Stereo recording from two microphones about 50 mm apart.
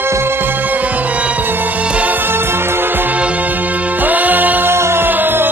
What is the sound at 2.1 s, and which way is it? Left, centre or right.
Music, right.